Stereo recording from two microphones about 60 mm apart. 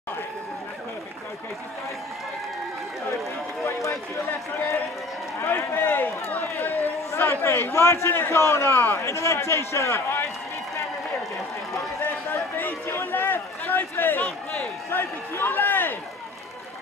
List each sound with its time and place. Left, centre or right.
3.6 s run: left
5.8 s run: left
7.1 s a sound: left
7.7 s a man's voice: left
12.0 s run: left
14.9 s a man's voice: left